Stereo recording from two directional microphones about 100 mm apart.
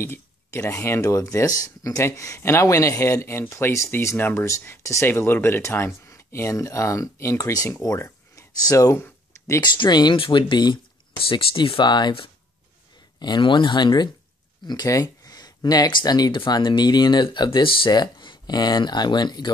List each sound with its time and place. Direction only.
0.0 s speech: 25° left (ahead or behind)
9.6 s speech: 45° left (ahead or behind)
10.1 s speech: 55° left (ahead or behind)
13.2 s speech: 50° left (ahead or behind)